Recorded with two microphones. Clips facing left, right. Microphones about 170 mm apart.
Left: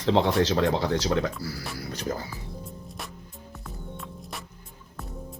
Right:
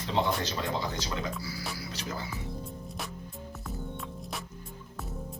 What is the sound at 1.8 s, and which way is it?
Music, 50° left (ahead or behind).